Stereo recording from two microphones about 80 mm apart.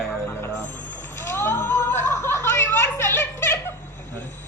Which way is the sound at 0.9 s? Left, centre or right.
Left.